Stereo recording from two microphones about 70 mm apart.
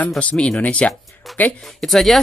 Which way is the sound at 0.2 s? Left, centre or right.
Centre.